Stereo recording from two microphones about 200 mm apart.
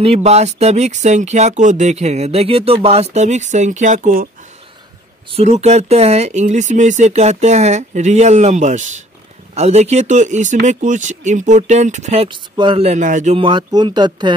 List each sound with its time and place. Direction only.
0.0 s speech: 30° right (ahead or behind)
5.3 s speech: 30° right (ahead or behind)